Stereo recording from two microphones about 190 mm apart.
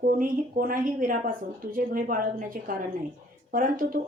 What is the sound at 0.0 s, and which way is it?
A woman's voice, 45° right (ahead or behind).